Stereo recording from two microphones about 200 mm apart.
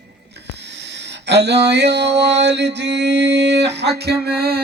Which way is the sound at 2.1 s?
60° right (ahead or behind).